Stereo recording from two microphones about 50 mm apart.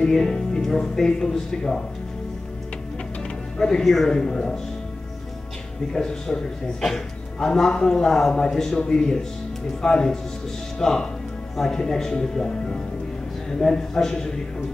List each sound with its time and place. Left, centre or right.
0.1 s speech: centre
3.5 s speech: centre
4.1 s speech: centre
5.9 s speech: centre
11.8 s speech: centre